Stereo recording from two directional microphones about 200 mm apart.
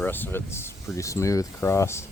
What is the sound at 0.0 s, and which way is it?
Speech, 10° left (ahead or behind).